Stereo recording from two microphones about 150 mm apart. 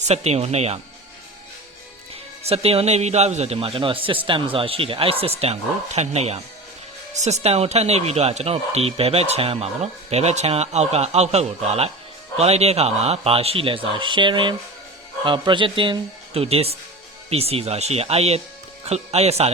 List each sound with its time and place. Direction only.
0.1 s speech: 45° right (ahead or behind)
2.4 s speech: 40° right (ahead or behind)